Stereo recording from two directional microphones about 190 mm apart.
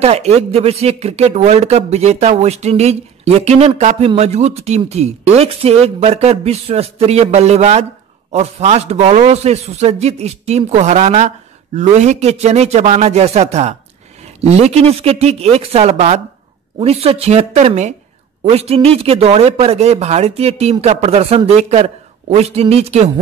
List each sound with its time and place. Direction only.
0.0 s speech: 35° right (ahead or behind)